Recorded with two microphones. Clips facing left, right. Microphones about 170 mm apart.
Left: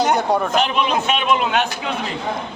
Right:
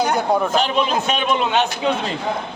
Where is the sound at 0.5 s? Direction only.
35° right (ahead or behind).